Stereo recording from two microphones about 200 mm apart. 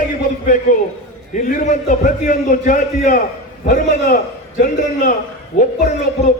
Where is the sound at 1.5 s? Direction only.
40° left (ahead or behind).